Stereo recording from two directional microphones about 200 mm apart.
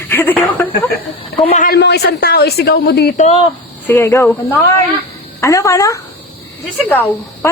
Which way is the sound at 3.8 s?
10° left (ahead or behind).